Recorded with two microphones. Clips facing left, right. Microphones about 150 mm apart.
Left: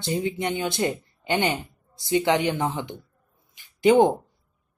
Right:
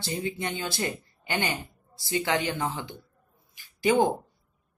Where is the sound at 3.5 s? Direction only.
20° left (ahead or behind).